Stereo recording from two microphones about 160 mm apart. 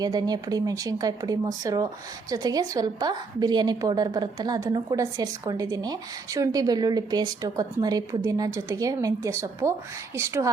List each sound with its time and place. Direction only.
0.0 s a woman's voice: 25° right (ahead or behind)